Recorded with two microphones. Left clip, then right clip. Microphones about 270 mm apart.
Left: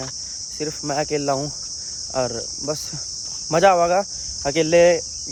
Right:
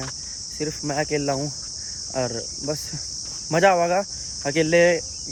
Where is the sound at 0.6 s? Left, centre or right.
Centre.